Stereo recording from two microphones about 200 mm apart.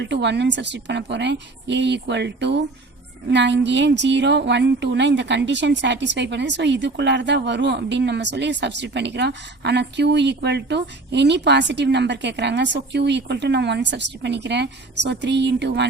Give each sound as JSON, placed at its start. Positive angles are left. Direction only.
{"t": 0.0, "sound": "a woman's voice", "side_deg": -60}